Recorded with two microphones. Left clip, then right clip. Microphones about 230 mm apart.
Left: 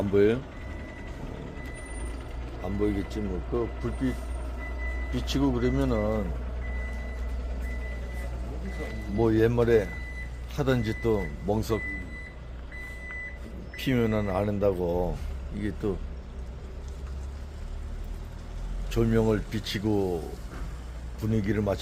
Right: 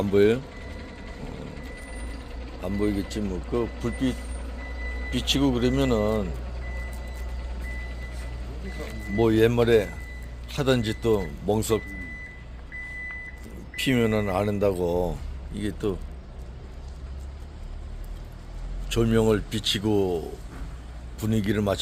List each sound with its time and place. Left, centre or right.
0.1 s speech: centre
2.6 s speech: centre
5.1 s speech: right
9.1 s speech: right
13.7 s speech: centre
18.9 s speech: centre